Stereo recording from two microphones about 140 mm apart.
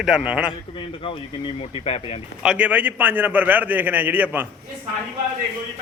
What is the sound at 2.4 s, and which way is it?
A man's voice, 10° right (ahead or behind).